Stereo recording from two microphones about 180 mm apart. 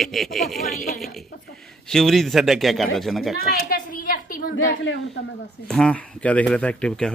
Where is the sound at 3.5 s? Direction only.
55° left (ahead or behind).